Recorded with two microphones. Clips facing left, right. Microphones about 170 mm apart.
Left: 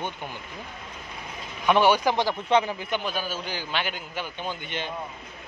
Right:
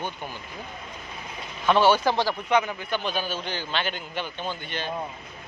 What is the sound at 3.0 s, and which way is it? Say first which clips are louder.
A man's voice: right 1 dB; 5° left (ahead or behind).